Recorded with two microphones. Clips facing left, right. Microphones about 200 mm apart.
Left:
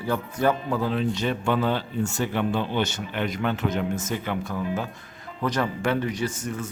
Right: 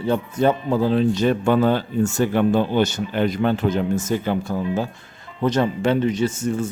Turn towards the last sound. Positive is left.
turn(degrees=-25)  # may be behind; listen again after turning